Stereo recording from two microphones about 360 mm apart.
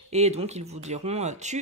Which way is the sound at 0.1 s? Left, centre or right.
Centre.